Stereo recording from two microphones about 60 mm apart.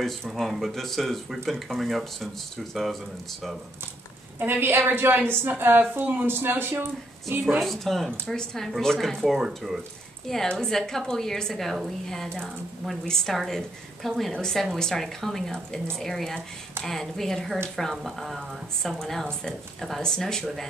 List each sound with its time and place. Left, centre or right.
0.3 s speech: centre
4.4 s a woman's voice: right
7.6 s a woman's voice: centre